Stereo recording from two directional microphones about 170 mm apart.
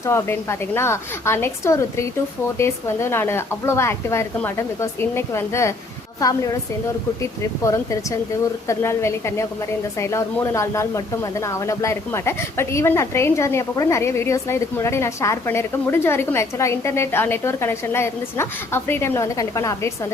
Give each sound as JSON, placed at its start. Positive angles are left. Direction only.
{"t": 0.0, "sound": "speech", "side_deg": 15}